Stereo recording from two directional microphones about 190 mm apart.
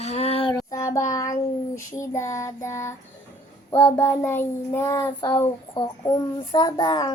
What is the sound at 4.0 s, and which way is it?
Child singing, 10° left (ahead or behind).